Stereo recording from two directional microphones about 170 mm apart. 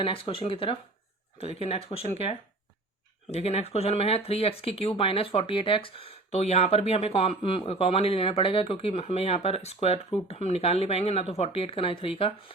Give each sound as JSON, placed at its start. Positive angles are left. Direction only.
{"t": 0.0, "sound": "speech", "side_deg": 30}